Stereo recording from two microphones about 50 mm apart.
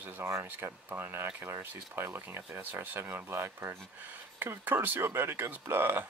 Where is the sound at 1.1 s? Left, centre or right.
Right.